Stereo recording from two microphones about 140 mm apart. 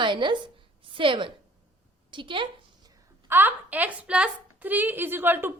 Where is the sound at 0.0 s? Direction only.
35° right (ahead or behind).